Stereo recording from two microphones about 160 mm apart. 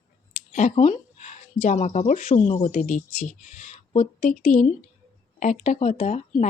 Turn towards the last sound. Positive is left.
turn(degrees=50)  # may be behind; listen again after turning